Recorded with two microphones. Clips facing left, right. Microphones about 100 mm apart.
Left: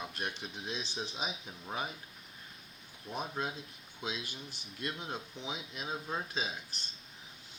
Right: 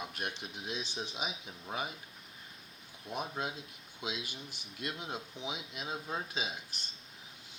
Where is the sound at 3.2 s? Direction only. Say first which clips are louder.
Even; 10° right (ahead or behind).